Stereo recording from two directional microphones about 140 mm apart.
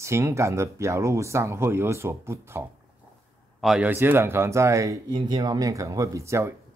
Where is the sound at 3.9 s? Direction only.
15° right (ahead or behind).